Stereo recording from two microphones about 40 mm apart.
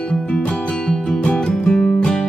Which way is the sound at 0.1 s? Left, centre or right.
Left.